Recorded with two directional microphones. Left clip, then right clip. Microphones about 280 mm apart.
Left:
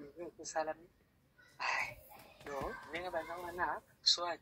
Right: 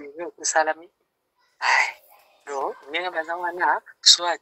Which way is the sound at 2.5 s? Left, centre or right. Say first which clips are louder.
Right 15 dB; right.